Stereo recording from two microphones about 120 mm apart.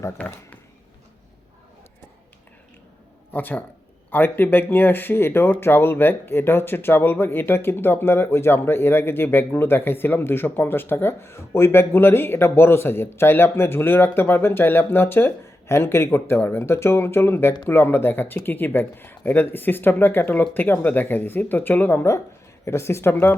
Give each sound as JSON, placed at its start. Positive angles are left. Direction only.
{"t": 0.2, "sound": "speech", "side_deg": 10}
{"t": 3.3, "sound": "speech", "side_deg": 15}